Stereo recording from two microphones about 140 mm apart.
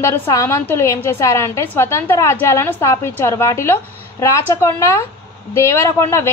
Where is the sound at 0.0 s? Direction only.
20° left (ahead or behind).